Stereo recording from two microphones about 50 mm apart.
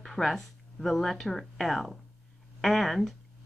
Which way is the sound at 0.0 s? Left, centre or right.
Centre.